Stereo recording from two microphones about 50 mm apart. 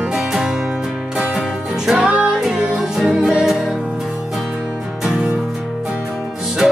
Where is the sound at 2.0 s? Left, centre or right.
Right.